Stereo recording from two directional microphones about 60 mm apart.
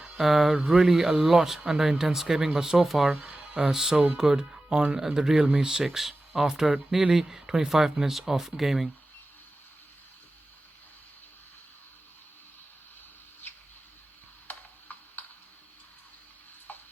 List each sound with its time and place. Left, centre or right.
0.2 s speech: centre
3.1 s music: right
3.6 s speech: centre
13.4 s a sound: left
14.4 s tick-tock: left
16.7 s music: left